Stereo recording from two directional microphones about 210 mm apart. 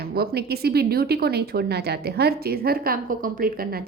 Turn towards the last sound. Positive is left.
turn(degrees=-45)  # may be behind; listen again after turning